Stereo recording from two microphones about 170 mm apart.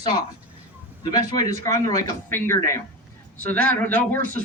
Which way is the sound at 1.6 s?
20° left (ahead or behind).